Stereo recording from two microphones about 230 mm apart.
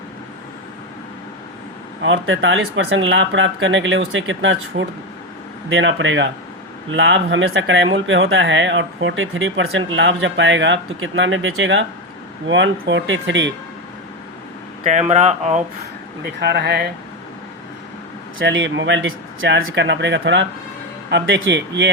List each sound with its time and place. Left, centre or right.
2.0 s speech: right
15.1 s speech: right
16.2 s speech: right
18.3 s speech: right